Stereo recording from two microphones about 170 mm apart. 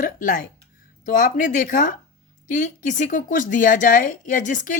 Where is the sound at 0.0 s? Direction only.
55° left (ahead or behind).